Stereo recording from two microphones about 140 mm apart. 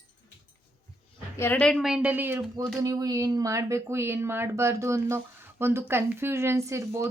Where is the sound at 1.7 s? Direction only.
5° right (ahead or behind).